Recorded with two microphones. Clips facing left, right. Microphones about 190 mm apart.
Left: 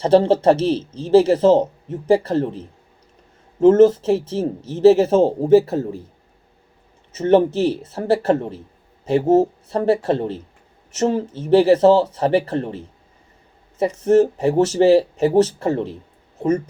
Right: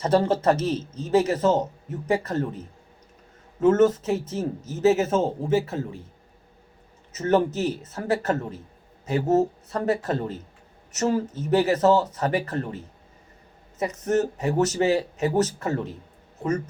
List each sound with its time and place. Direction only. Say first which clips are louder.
0.0 s speech: left 7 dB; 30° left (ahead or behind)
7.1 s speech: left 7 dB; 30° left (ahead or behind)